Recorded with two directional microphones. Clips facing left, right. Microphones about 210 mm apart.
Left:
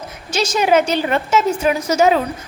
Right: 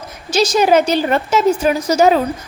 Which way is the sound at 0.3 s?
35° right (ahead or behind).